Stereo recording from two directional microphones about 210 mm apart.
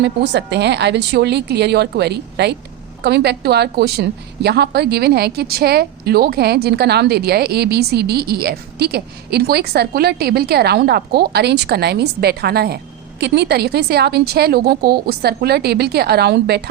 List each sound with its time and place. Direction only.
0.0 s a woman's voice: 55° right (ahead or behind)